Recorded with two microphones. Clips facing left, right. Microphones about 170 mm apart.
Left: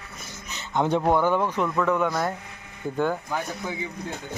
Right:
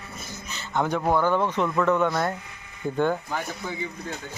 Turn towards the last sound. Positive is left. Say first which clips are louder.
# left 1 dB
turn(degrees=10)  # may be behind; listen again after turning